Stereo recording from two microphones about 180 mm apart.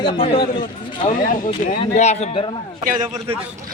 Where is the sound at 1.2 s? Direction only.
50° left (ahead or behind).